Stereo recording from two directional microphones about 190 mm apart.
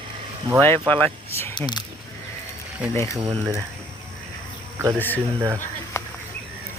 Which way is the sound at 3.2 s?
15° right (ahead or behind).